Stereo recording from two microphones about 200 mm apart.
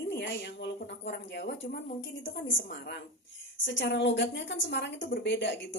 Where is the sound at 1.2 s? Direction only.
60° left (ahead or behind).